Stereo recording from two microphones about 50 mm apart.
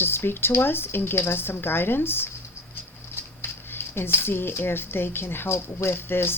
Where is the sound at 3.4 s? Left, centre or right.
Left.